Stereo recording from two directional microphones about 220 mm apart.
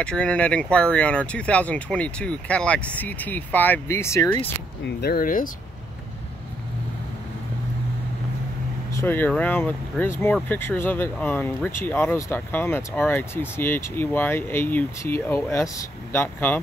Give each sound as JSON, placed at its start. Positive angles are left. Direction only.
{"t": 0.0, "sound": "speech", "side_deg": 5}
{"t": 4.8, "sound": "speech", "side_deg": 45}
{"t": 9.0, "sound": "speech", "side_deg": 10}